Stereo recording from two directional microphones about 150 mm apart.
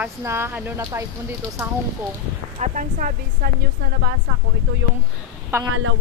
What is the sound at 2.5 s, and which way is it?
Speech, 55° right (ahead or behind).